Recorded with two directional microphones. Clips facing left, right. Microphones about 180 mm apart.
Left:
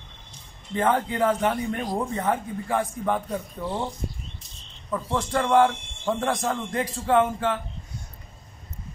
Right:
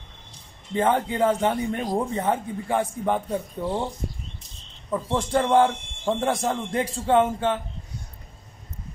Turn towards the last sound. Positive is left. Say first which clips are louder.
# right 1 dB
turn(degrees=-20)  # may be behind; listen again after turning